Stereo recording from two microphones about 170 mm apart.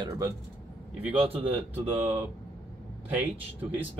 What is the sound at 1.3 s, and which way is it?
Speech, 35° right (ahead or behind).